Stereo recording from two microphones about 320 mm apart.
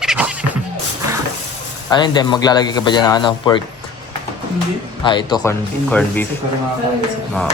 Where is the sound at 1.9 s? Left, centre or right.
Centre.